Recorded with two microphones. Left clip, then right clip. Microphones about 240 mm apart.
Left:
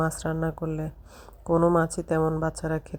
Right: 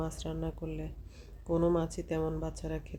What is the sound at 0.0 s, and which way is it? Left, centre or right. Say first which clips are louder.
Speech: left 10 dB; left.